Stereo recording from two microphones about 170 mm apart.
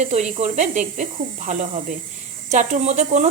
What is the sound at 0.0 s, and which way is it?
Speech, 40° right (ahead or behind).